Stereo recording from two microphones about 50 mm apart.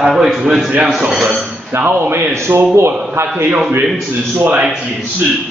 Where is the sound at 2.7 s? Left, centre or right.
Right.